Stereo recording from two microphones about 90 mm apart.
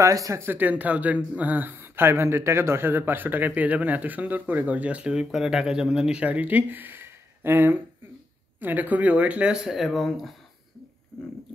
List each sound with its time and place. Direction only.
0.0 s speech: 40° right (ahead or behind)
0.4 s speech: 20° right (ahead or behind); by 10.3 s centre (ahead or behind)